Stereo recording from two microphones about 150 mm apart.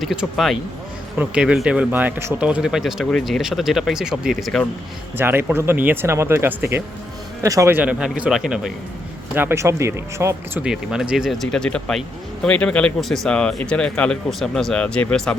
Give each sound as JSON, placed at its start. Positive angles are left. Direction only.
{"t": 0.0, "sound": "speech", "side_deg": 0}
{"t": 5.1, "sound": "speech", "side_deg": -15}
{"t": 10.6, "sound": "speech", "side_deg": -5}